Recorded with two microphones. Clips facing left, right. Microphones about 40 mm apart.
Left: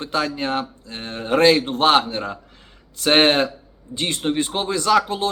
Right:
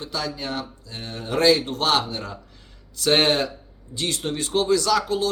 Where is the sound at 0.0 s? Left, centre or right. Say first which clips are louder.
Left 6 dB; left.